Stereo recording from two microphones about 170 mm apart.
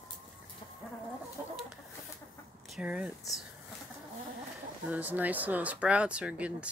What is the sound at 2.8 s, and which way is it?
Speech, 5° right (ahead or behind).